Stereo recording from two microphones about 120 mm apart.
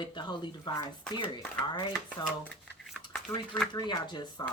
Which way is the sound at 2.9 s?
5° left (ahead or behind).